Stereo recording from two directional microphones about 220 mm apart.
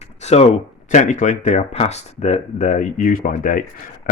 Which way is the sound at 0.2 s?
30° left (ahead or behind).